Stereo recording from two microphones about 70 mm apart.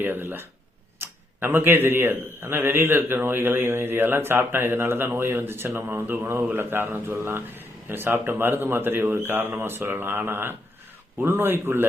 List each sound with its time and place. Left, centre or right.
0.0 s speech: right